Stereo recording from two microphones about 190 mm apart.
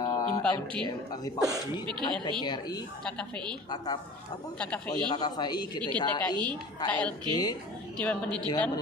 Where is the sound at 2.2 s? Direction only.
20° left (ahead or behind).